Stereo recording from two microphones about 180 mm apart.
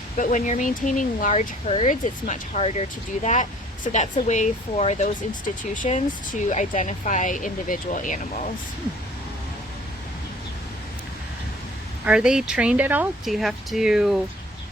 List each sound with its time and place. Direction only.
0.2 s speech: 45° left (ahead or behind)
3.9 s speech: 45° left (ahead or behind)
12.0 s speech: 5° right (ahead or behind)